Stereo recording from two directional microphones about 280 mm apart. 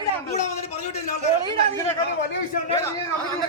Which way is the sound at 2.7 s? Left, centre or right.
Centre.